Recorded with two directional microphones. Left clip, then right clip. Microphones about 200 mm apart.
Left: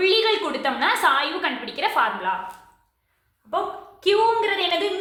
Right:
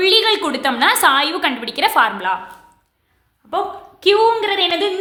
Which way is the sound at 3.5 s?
40° right (ahead or behind).